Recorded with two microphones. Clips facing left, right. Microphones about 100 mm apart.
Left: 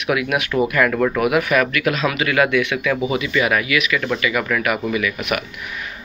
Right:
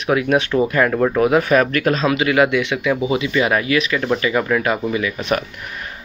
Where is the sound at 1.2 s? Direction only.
30° right (ahead or behind).